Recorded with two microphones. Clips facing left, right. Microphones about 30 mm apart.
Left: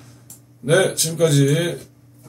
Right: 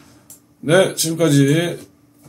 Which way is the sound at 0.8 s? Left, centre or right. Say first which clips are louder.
Right 2 dB; right.